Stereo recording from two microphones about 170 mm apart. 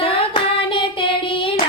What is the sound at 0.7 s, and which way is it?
Child singing, 30° left (ahead or behind).